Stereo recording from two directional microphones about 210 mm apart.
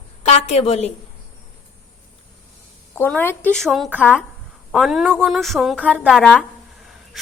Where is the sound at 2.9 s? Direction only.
10° left (ahead or behind).